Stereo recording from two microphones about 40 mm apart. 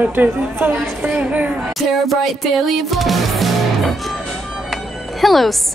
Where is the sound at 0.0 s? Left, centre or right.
Right.